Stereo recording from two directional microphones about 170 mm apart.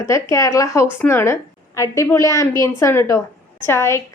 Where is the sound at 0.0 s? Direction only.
20° left (ahead or behind).